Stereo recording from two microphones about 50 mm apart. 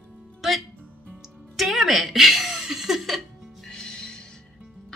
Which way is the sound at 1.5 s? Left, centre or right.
Centre.